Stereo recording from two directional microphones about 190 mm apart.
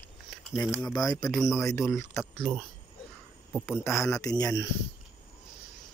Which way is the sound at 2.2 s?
Centre (ahead or behind).